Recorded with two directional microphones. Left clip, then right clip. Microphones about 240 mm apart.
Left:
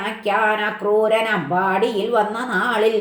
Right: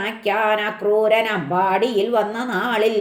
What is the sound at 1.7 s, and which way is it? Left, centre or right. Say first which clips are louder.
Speech: even; right.